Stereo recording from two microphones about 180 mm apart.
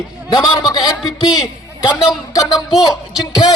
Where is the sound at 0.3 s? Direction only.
25° left (ahead or behind).